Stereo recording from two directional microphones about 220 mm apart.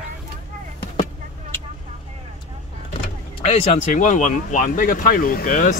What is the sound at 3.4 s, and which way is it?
Speech, 30° left (ahead or behind).